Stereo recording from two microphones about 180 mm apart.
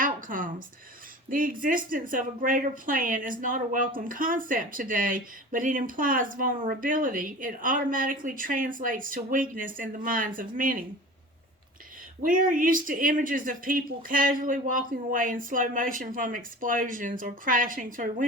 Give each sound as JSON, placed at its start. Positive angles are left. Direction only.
{"t": 0.0, "sound": "a sound", "side_deg": -50}
{"t": 1.3, "sound": "speech", "side_deg": -50}
{"t": 12.2, "sound": "speech", "side_deg": -50}